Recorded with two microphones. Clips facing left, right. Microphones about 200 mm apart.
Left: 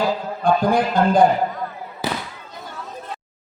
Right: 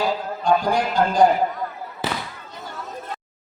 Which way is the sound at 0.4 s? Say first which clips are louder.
Left 2 dB; 55° left (ahead or behind).